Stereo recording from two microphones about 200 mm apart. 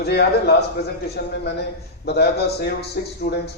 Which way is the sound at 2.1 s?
55° left (ahead or behind).